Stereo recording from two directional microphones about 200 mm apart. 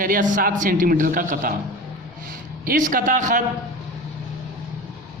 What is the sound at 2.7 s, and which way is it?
Speech, 40° right (ahead or behind).